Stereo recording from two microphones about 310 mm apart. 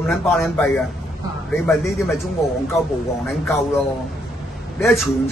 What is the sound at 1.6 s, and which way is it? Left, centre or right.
Speech, centre.